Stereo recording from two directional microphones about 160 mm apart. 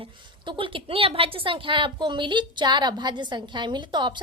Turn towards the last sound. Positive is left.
turn(degrees=-30)  # may be behind; listen again after turning